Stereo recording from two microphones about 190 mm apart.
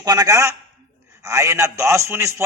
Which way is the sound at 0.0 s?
20° right (ahead or behind).